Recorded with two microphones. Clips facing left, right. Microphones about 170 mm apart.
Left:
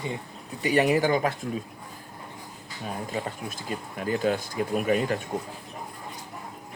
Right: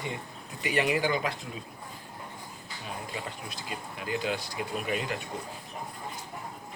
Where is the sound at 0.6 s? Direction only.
40° left (ahead or behind).